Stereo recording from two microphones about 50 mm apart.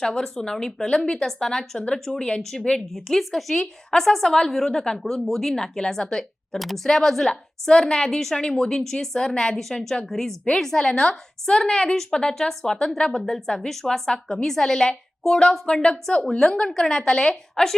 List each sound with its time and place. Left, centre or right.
0.0 s a woman's voice: centre